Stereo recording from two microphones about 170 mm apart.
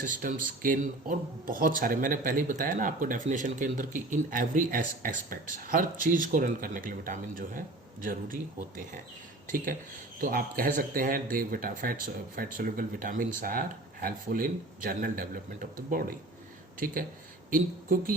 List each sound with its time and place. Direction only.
0.0 s speech: 50° right (ahead or behind)
10.2 s speech: 60° right (ahead or behind)